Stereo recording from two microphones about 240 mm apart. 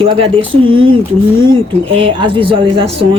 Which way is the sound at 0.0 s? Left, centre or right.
Right.